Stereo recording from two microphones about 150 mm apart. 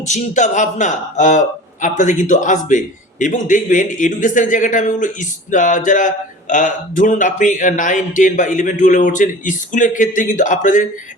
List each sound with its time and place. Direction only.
0.1 s a man's voice: 55° left (ahead or behind)